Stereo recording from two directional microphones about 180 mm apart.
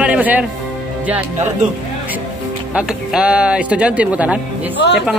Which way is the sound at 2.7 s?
5° right (ahead or behind).